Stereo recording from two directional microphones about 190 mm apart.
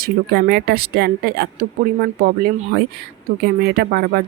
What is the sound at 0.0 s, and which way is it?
Speech, 55° right (ahead or behind).